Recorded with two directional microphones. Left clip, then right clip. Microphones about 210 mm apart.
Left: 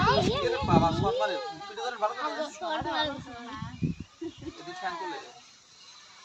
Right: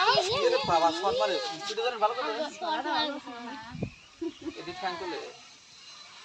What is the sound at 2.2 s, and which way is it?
Speech, 45° left (ahead or behind).